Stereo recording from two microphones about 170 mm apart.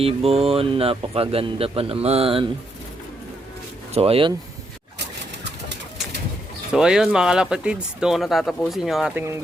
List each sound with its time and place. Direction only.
0.0 s speech: 35° right (ahead or behind)
3.9 s speech: 35° right (ahead or behind)
6.7 s speech: 5° right (ahead or behind)